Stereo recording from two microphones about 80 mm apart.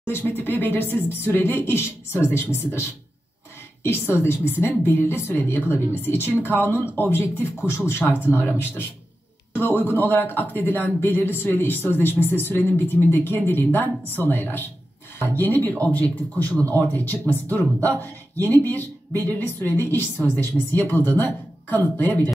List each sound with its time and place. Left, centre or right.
0.4 s a man's voice: left
4.1 s a man's voice: left